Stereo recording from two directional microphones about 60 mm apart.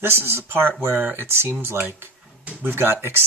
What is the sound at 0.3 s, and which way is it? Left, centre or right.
Speech, right.